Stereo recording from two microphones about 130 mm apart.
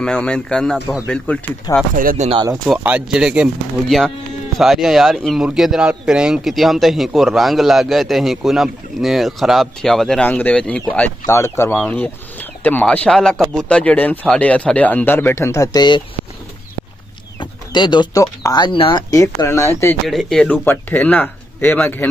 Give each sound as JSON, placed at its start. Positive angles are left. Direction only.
{"t": 0.0, "sound": "speech", "side_deg": 5}
{"t": 2.0, "sound": "speech", "side_deg": -90}
{"t": 2.8, "sound": "speech", "side_deg": -10}
{"t": 11.2, "sound": "speech", "side_deg": 20}
{"t": 17.4, "sound": "speech", "side_deg": 35}
{"t": 19.0, "sound": "speech", "side_deg": 25}
{"t": 20.1, "sound": "speech", "side_deg": 0}